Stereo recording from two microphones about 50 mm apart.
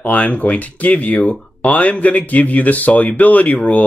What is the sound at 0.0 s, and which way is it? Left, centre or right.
Speech, left.